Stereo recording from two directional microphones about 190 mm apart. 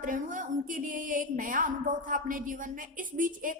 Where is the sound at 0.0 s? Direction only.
45° right (ahead or behind).